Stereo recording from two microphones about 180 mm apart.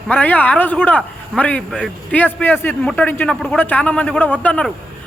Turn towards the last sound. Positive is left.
turn(degrees=5)  # may be behind; listen again after turning